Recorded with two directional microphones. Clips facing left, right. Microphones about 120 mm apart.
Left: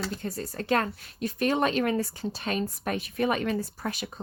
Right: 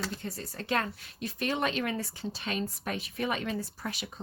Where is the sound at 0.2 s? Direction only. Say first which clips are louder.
Left 5 dB; 45° left (ahead or behind).